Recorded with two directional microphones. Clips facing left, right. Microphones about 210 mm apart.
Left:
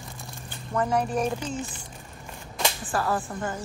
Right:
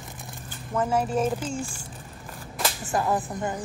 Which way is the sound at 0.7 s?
5° right (ahead or behind).